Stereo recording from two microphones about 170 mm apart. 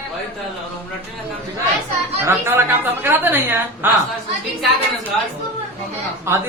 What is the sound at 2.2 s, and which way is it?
A woman's voice, 15° right (ahead or behind).